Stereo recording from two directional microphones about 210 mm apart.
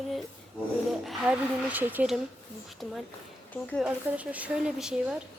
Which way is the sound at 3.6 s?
5° left (ahead or behind).